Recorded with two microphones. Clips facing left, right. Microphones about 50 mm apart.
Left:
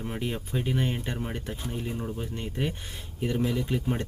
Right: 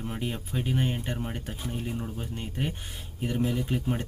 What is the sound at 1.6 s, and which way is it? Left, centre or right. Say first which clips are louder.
Speech: even; centre.